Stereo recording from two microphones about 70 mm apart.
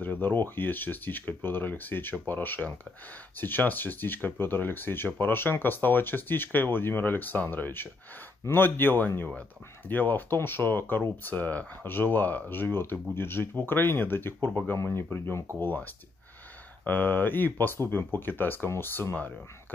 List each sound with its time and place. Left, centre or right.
0.0 s speech: left